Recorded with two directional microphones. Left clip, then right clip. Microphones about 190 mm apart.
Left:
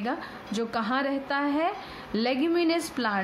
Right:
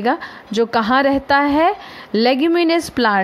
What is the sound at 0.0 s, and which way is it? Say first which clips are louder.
A woman's voice: right 13 dB; 40° right (ahead or behind).